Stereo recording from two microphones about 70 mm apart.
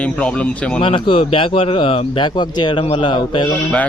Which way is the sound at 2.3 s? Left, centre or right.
Left.